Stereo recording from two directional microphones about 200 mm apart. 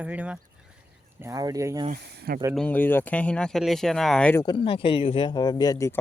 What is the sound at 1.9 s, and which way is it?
Speech, 45° right (ahead or behind).